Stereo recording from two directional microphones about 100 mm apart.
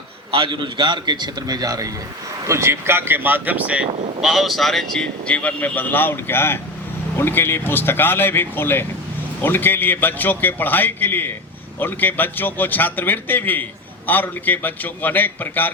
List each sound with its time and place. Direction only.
0.3 s a man's voice: 55° right (ahead or behind); by 1.9 s 40° right (ahead or behind)
2.5 s speech: 25° right (ahead or behind)
4.2 s a man's voice: centre (ahead or behind); by 15.7 s 20° left (ahead or behind)